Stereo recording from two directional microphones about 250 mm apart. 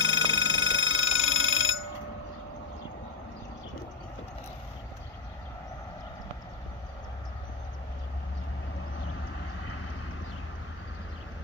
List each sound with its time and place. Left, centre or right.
0.0 s alarm: left
9.6 s vehicle: left